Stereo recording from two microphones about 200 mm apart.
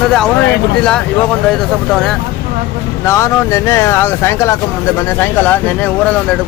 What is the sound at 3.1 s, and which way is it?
Speech, 15° left (ahead or behind).